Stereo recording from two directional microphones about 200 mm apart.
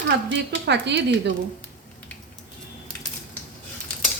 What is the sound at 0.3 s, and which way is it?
Speech, 60° right (ahead or behind).